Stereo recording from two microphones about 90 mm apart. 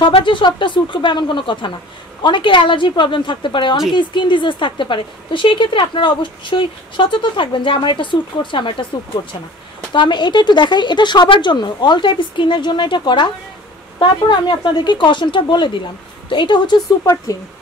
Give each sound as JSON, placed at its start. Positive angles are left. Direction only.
{"t": 0.0, "sound": "a woman's voice", "side_deg": 65}
{"t": 9.9, "sound": "a woman's voice", "side_deg": 60}
{"t": 17.0, "sound": "speech", "side_deg": 35}